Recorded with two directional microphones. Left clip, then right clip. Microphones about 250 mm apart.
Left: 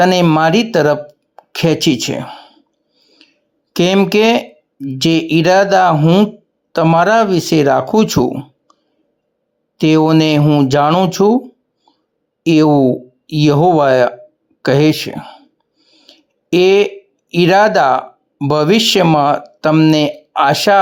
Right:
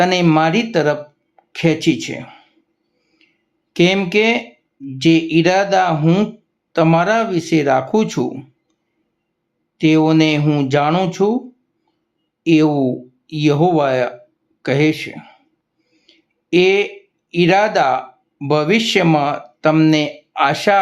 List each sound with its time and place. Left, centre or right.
0.0 s speech: left
3.2 s a sound: left
3.7 s speech: left
9.7 s speech: left
12.4 s speech: left